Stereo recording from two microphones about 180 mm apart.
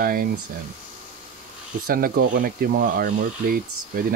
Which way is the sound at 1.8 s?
50° right (ahead or behind).